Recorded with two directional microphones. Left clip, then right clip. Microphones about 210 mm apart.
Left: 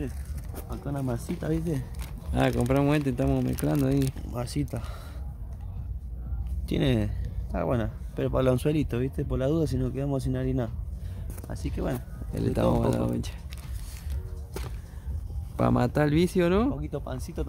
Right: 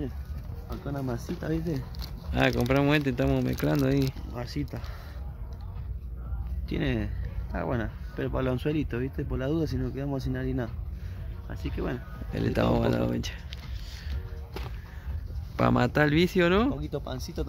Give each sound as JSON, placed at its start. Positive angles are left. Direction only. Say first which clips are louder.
{"t": 0.9, "sound": "speech", "louder": "left 2 dB", "side_deg": 35}
{"t": 2.5, "sound": "speech", "louder": "even", "side_deg": -5}
{"t": 2.8, "sound": "speech", "louder": "right 1 dB", "side_deg": 5}
{"t": 4.3, "sound": "speech", "louder": "left 3 dB", "side_deg": 50}
{"t": 6.7, "sound": "speech", "louder": "left 4 dB", "side_deg": 50}
{"t": 12.3, "sound": "speech", "louder": "even", "side_deg": 5}
{"t": 15.5, "sound": "speech", "louder": "right 1 dB", "side_deg": 5}